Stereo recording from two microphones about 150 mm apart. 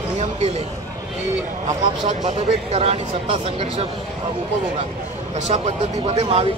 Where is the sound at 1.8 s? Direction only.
50° right (ahead or behind).